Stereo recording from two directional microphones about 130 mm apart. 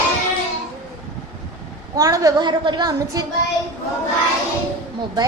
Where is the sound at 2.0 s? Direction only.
25° right (ahead or behind).